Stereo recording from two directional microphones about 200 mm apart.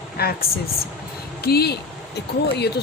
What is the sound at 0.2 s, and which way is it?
Speech, 50° left (ahead or behind).